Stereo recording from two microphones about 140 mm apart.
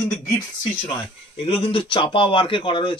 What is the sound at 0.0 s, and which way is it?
Speech, 25° left (ahead or behind).